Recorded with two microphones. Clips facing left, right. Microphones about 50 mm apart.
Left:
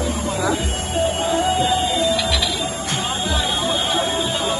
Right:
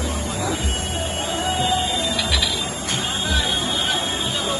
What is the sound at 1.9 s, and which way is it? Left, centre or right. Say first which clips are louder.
Music: left 5 dB; left.